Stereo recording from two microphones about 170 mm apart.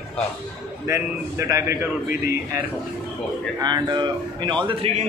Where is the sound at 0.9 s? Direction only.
15° right (ahead or behind).